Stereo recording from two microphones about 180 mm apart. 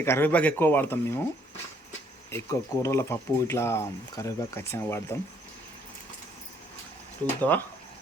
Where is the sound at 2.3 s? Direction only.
15° left (ahead or behind).